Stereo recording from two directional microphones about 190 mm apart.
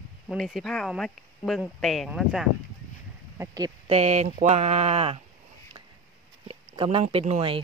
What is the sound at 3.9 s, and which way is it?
Speech, 35° right (ahead or behind).